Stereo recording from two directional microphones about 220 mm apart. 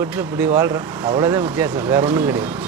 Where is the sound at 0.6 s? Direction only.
20° right (ahead or behind).